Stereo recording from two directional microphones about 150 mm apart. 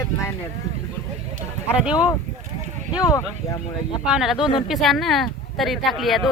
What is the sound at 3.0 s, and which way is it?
Speech, 25° left (ahead or behind).